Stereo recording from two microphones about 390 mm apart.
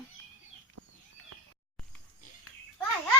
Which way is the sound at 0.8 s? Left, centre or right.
Right.